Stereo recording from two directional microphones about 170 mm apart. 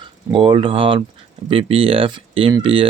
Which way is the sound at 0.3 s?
30° right (ahead or behind).